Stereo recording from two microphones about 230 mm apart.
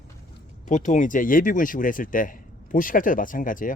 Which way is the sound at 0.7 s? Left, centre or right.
Left.